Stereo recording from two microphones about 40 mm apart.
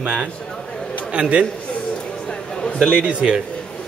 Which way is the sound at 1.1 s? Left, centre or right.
Right.